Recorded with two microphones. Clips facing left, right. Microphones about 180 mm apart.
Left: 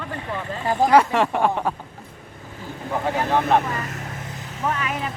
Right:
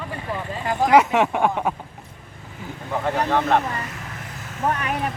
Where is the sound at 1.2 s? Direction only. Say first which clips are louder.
Even; 5° right (ahead or behind).